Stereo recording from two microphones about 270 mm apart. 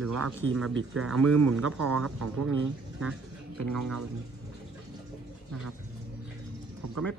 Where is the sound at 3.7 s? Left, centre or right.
Right.